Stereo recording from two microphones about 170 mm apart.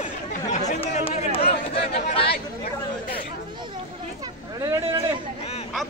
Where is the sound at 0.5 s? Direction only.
40° left (ahead or behind).